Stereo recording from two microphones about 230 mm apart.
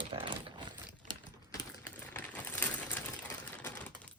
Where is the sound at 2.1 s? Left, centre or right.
Centre.